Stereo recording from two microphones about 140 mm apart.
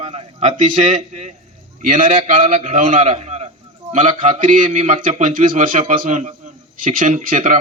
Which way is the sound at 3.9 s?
60° right (ahead or behind).